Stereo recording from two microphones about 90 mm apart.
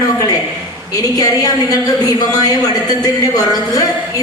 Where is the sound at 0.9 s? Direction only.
40° left (ahead or behind).